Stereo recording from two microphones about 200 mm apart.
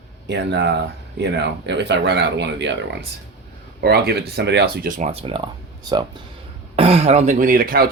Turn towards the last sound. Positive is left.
turn(degrees=-45)  # may be behind; listen again after turning